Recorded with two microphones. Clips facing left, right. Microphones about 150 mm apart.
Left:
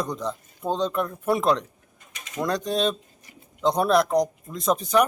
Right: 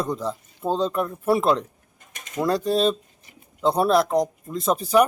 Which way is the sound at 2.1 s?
50° right (ahead or behind).